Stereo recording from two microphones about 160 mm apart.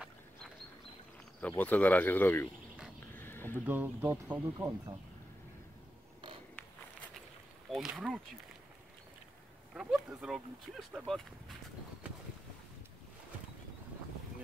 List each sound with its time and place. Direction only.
1.6 s speech: 10° left (ahead or behind)
3.2 s a sound: 15° left (ahead or behind)
3.6 s speech: 10° right (ahead or behind)
7.7 s speech: 5° right (ahead or behind)
9.8 s speech: 5° right (ahead or behind)